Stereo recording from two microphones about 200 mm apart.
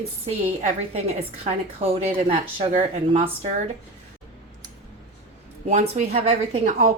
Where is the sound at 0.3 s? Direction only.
30° right (ahead or behind).